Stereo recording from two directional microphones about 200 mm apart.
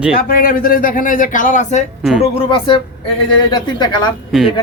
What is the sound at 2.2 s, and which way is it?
Speech, 25° left (ahead or behind).